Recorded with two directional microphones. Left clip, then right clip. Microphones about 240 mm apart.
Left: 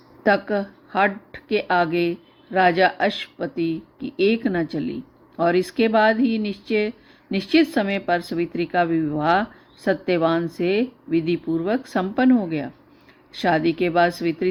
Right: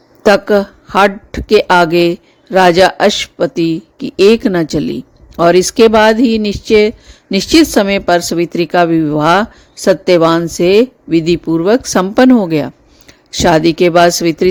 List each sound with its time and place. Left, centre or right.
0.3 s speech: right